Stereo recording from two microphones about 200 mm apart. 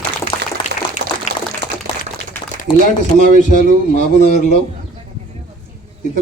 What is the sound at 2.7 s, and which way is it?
Speech, 25° left (ahead or behind).